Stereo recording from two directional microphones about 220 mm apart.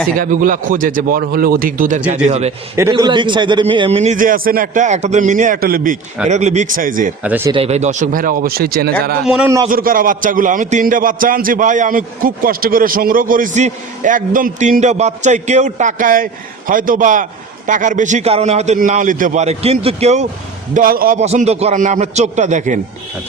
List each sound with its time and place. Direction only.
0.2 s a man's voice: 40° right (ahead or behind)
2.7 s a man's voice: 15° right (ahead or behind); by 7.1 s 40° right (ahead or behind)
7.2 s a man's voice: 10° right (ahead or behind)
7.5 s a man's voice: 30° right (ahead or behind); by 9.1 s 45° right (ahead or behind)
9.2 s a man's voice: 5° right (ahead or behind)
9.6 s a man's voice: 40° right (ahead or behind)
20.7 s a man's voice: 40° right (ahead or behind)